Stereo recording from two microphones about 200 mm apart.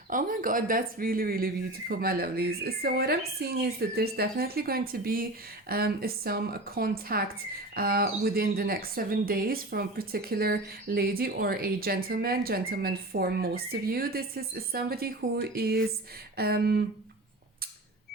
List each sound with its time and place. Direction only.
0.1 s speech: 40° right (ahead or behind)